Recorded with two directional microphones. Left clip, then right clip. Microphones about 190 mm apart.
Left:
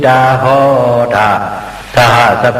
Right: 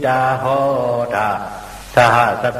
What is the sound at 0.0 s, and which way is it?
A man's voice, 30° right (ahead or behind).